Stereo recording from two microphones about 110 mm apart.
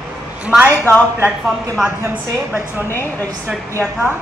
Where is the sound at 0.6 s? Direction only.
20° left (ahead or behind).